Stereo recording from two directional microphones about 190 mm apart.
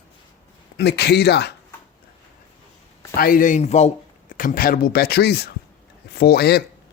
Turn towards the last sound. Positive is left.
turn(degrees=55)  # may be behind; listen again after turning